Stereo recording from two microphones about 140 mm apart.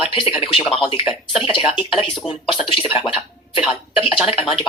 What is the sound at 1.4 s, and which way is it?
Speech, 40° left (ahead or behind).